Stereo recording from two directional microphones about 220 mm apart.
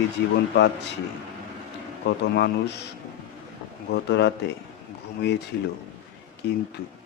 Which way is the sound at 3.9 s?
50° left (ahead or behind).